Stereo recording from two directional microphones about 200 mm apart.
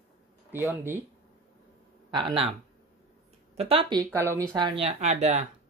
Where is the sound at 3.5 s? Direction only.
30° right (ahead or behind).